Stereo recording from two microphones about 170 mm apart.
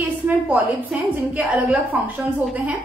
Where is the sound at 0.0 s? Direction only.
10° right (ahead or behind).